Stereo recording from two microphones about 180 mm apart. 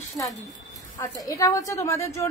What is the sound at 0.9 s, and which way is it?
A woman's voice, 20° left (ahead or behind).